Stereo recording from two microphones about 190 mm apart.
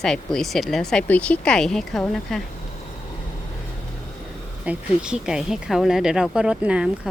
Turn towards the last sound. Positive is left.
turn(degrees=-5)  # may be behind; listen again after turning